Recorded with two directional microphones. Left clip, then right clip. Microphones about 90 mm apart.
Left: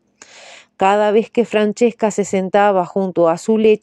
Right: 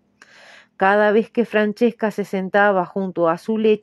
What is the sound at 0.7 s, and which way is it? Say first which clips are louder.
Speech: left 2 dB; 15° left (ahead or behind).